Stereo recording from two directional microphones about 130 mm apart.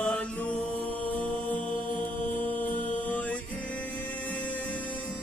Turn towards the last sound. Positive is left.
turn(degrees=10)  # may be behind; listen again after turning